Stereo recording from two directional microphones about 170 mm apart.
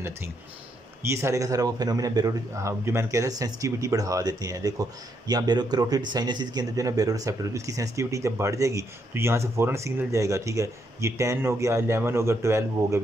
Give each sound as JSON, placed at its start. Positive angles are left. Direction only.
{"t": 1.0, "sound": "speech", "side_deg": -15}